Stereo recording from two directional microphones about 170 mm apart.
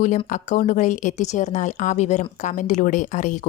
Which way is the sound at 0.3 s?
50° left (ahead or behind).